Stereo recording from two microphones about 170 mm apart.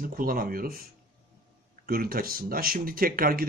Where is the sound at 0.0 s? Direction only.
55° right (ahead or behind).